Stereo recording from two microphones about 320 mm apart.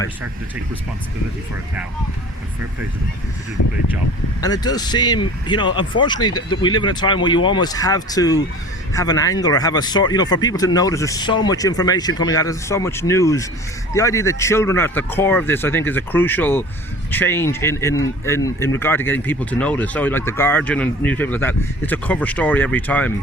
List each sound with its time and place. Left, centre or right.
3.6 s speech: left
4.4 s speech: centre